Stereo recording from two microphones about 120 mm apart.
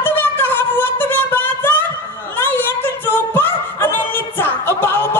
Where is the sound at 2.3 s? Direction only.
20° left (ahead or behind).